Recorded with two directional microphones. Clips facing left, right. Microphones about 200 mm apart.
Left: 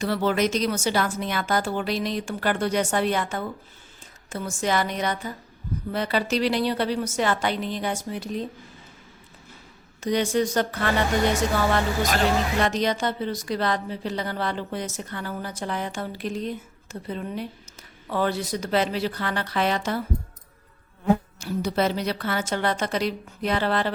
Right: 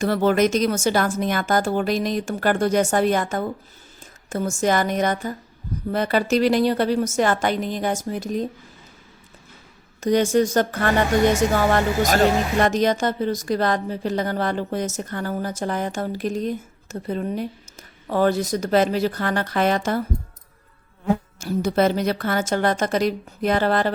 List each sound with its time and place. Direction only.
0.0 s speech: 50° right (ahead or behind)
10.0 s speech: 45° right (ahead or behind)
21.3 s speech: 50° right (ahead or behind)